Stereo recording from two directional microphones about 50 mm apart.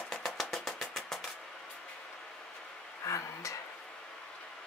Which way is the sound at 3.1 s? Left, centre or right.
Left.